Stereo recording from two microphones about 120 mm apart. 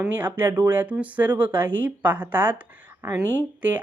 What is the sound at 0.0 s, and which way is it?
A woman's voice, 15° right (ahead or behind).